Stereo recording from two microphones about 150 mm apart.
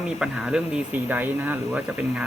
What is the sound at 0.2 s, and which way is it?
Speech, 5° right (ahead or behind).